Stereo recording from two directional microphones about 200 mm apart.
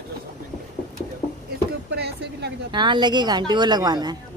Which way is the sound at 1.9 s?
55° right (ahead or behind).